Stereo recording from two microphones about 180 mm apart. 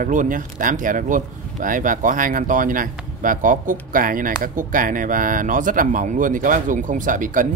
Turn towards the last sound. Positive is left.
turn(degrees=-45)  # may be behind; listen again after turning